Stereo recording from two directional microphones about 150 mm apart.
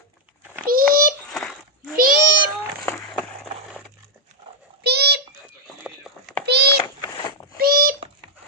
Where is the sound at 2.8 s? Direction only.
15° left (ahead or behind).